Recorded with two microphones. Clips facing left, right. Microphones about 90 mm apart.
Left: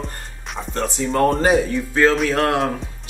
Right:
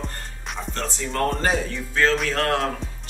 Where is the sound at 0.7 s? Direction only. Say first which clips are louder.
Left 8 dB; 15° left (ahead or behind).